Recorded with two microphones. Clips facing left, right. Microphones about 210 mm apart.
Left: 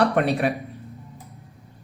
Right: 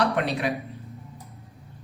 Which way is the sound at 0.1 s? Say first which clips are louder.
Left 4 dB; 50° left (ahead or behind).